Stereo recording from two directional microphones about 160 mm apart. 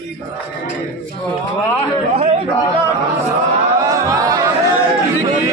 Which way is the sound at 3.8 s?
20° right (ahead or behind).